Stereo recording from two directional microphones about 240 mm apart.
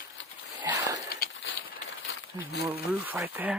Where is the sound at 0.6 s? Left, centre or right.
Centre.